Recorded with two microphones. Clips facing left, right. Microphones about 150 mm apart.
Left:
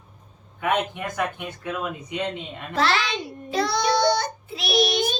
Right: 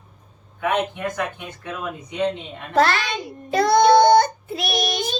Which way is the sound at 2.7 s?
50° right (ahead or behind).